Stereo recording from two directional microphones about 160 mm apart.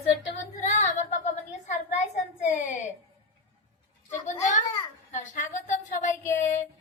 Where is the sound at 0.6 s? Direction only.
45° left (ahead or behind).